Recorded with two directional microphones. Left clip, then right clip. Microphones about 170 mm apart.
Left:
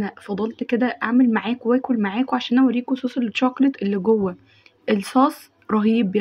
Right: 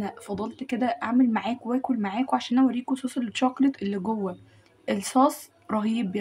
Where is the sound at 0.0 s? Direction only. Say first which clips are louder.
Left 6 dB; 10° left (ahead or behind).